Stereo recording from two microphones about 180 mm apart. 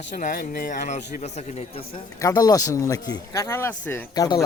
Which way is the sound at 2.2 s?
20° left (ahead or behind).